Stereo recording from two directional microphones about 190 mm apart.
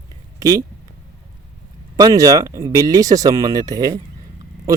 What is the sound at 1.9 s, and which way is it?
Speech, 20° right (ahead or behind).